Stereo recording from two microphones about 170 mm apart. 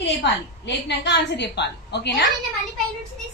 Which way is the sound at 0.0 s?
90° left.